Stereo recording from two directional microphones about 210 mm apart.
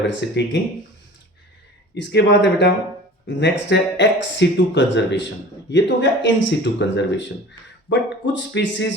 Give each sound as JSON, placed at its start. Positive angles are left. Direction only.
{"t": 0.1, "sound": "speech", "side_deg": 60}
{"t": 2.0, "sound": "speech", "side_deg": 55}